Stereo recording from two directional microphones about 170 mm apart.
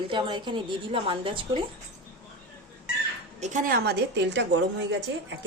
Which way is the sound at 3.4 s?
50° right (ahead or behind).